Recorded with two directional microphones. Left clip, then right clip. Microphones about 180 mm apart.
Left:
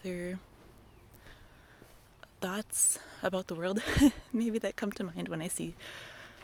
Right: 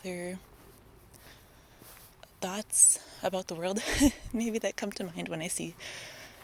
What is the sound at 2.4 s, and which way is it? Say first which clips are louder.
Speech: right 5 dB; 40° left (ahead or behind).